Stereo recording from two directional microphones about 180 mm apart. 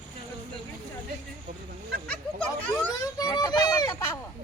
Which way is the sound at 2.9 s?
20° left (ahead or behind).